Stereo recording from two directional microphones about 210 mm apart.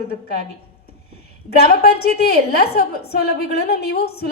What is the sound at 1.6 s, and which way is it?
A woman's voice, 45° left (ahead or behind).